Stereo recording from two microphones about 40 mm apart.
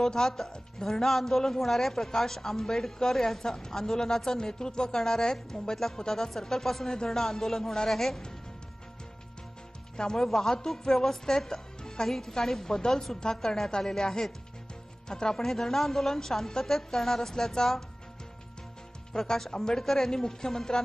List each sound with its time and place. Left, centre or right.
0.0 s a man's voice: centre
9.9 s a man's voice: centre
19.1 s a man's voice: centre